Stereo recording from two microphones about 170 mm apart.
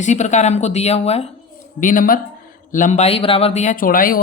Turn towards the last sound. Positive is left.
turn(degrees=55)  # may be behind; listen again after turning